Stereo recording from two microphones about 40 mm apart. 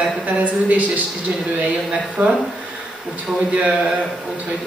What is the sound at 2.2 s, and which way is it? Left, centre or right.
Speech, right.